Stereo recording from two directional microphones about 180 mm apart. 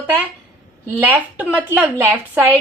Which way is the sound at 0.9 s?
10° right (ahead or behind).